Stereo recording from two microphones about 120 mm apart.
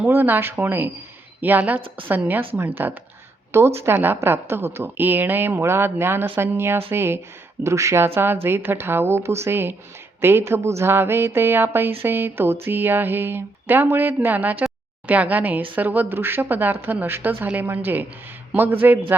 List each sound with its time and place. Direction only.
0.0 s a woman's voice: 20° right (ahead or behind)